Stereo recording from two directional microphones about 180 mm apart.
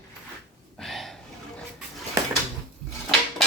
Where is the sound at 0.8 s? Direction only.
Centre (ahead or behind).